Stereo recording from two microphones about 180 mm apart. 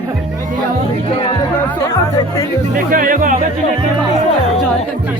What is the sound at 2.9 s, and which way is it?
Speech, 50° right (ahead or behind).